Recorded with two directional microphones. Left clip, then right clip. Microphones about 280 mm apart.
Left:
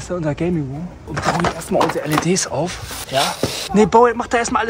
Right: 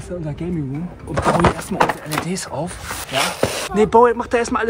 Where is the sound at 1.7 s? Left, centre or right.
Centre.